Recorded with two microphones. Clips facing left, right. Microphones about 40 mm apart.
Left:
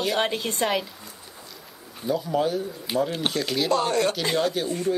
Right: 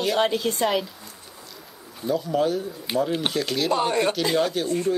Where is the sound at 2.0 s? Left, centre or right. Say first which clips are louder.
Right 1 dB; centre.